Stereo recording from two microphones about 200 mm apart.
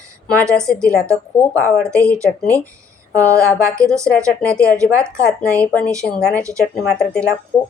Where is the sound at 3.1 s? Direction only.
15° right (ahead or behind).